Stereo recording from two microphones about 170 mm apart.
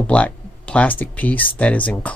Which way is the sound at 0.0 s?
5° left (ahead or behind).